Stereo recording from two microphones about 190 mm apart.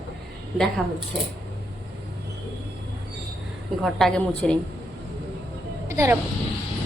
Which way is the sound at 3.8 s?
5° left (ahead or behind).